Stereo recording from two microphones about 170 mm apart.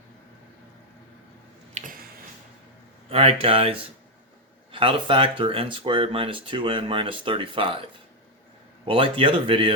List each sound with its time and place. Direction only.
1.8 s a sound: 45° right (ahead or behind)
3.1 s speech: 35° right (ahead or behind)
8.9 s speech: 30° right (ahead or behind)